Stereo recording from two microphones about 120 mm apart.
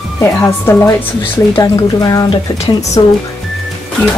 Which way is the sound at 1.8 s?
30° left (ahead or behind).